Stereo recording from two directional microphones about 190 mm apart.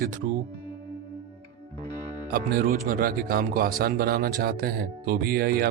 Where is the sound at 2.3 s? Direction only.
50° right (ahead or behind).